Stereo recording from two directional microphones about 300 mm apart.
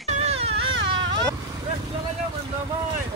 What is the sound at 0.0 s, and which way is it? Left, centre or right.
Baby cry, right.